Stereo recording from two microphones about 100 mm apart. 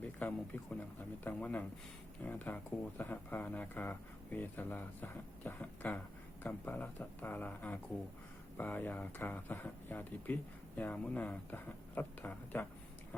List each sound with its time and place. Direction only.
0.0 s speech: 15° left (ahead or behind)